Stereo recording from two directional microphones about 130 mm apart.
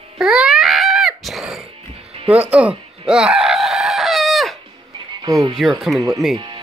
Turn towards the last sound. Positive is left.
turn(degrees=-35)  # may be behind; listen again after turning